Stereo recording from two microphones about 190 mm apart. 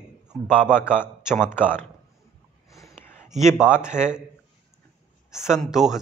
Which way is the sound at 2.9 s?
10° left (ahead or behind).